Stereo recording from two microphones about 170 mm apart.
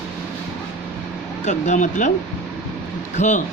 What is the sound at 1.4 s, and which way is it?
Speech, 45° left (ahead or behind).